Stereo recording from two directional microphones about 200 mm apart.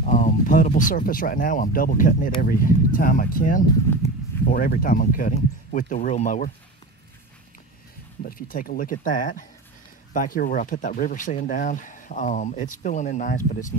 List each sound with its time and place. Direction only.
0.0 s speech: 40° left (ahead or behind)
8.2 s speech: 45° left (ahead or behind)